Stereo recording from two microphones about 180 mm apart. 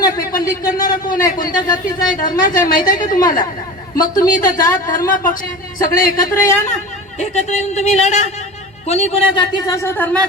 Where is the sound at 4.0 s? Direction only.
20° left (ahead or behind).